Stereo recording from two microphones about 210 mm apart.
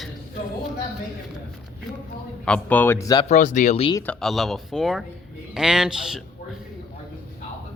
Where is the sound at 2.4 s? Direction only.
5° left (ahead or behind).